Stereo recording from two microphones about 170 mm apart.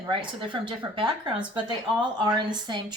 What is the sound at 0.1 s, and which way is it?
A woman's voice, 30° right (ahead or behind).